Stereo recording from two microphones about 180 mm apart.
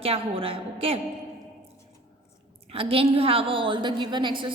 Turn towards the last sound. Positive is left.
turn(degrees=-25)  # may be behind; listen again after turning